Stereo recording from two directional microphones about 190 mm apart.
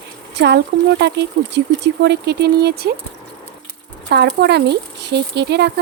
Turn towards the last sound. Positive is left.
turn(degrees=-60)  # may be behind; listen again after turning